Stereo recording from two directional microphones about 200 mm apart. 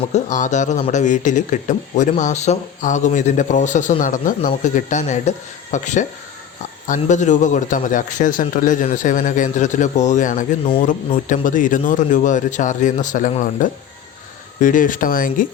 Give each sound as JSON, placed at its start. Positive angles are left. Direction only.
{"t": 0.1, "sound": "speech", "side_deg": 40}